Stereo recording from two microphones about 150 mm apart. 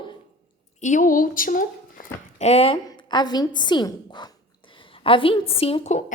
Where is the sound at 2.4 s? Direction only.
40° left (ahead or behind).